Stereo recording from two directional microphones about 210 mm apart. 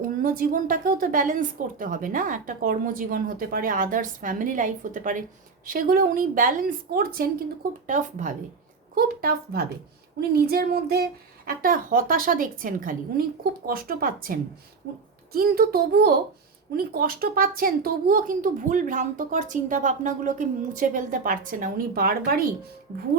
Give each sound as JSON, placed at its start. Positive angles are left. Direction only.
{"t": 0.0, "sound": "a woman's voice", "side_deg": -40}